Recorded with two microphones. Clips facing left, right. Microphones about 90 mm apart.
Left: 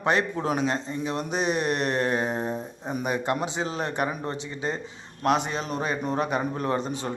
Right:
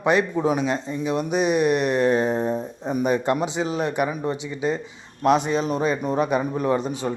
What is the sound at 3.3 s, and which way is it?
Speech, 20° right (ahead or behind).